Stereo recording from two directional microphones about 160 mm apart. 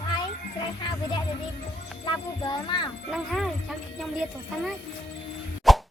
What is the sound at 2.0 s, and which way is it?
Speech, 30° left (ahead or behind).